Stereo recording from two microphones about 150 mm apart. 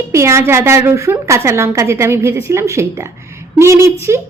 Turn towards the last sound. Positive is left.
turn(degrees=-20)  # may be behind; listen again after turning